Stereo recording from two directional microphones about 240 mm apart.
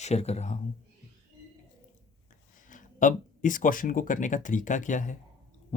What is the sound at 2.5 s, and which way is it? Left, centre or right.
Speech, left.